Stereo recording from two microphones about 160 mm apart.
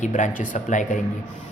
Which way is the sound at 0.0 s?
50° left (ahead or behind).